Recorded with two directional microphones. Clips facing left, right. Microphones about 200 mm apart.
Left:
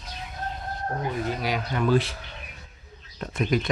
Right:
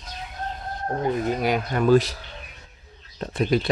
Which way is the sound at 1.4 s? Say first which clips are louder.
Right 4 dB; 50° right (ahead or behind).